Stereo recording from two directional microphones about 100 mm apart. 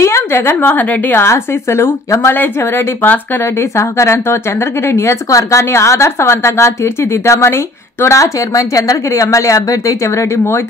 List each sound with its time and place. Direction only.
0.0 s speech: 25° left (ahead or behind)